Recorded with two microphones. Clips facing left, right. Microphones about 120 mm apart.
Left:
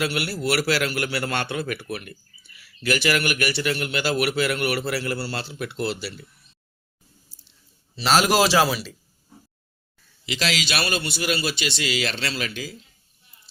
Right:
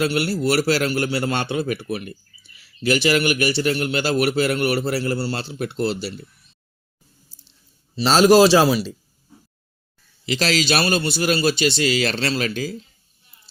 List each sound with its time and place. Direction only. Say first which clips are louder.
0.0 s a man's voice: right 5 dB; 30° right (ahead or behind)
7.9 s a man's voice: right 6 dB; 25° right (ahead or behind)
10.2 s a man's voice: right 6 dB; 35° right (ahead or behind)